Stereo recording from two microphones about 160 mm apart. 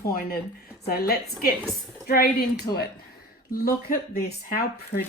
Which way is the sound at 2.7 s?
20° left (ahead or behind).